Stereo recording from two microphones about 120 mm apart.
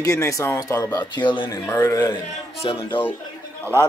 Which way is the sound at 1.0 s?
40° left (ahead or behind).